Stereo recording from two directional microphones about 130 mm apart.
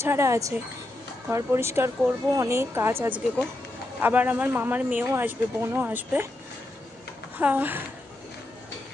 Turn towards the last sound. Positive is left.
turn(degrees=-15)  # may be behind; listen again after turning